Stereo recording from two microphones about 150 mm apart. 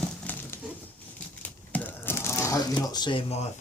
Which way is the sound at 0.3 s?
10° left (ahead or behind).